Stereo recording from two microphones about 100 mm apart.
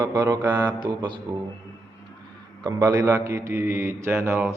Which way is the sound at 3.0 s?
25° right (ahead or behind).